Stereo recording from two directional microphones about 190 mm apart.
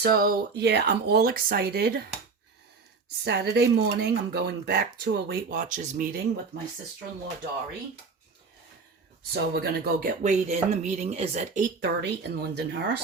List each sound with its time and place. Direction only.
0.0 s speech: 50° right (ahead or behind)
3.2 s speech: 60° right (ahead or behind); by 6.1 s 40° right (ahead or behind)
9.6 s speech: 50° right (ahead or behind)
11.8 s speech: 60° right (ahead or behind)